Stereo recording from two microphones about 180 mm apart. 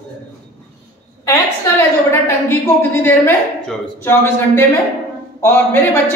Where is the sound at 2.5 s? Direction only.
10° left (ahead or behind).